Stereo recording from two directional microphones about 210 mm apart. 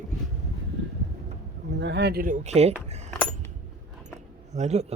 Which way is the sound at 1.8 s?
55° right (ahead or behind).